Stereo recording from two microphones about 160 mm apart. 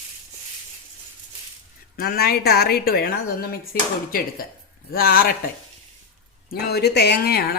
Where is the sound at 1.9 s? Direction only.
70° left (ahead or behind).